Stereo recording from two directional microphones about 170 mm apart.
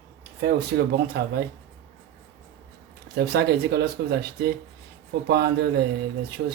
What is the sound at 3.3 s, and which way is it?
Speech, 75° right (ahead or behind).